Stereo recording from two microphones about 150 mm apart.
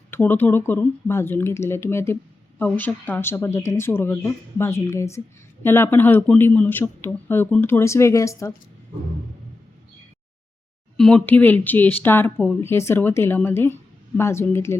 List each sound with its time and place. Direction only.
0.1 s speech: 15° left (ahead or behind)
10.9 s speech: 5° left (ahead or behind)